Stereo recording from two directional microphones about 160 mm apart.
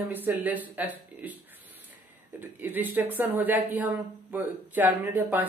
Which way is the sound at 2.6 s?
10° right (ahead or behind).